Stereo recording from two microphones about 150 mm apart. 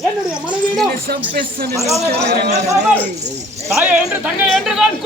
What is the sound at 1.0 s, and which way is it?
A man's voice, 80° right.